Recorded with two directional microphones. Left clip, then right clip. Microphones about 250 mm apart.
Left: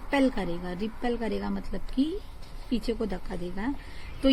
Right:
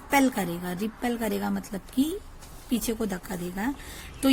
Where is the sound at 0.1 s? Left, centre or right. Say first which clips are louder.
Right 3 dB; right.